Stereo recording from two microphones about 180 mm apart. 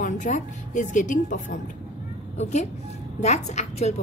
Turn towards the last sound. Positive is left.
turn(degrees=35)  # may be behind; listen again after turning